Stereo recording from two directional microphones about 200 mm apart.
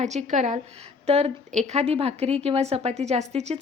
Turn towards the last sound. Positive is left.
turn(degrees=-35)  # may be behind; listen again after turning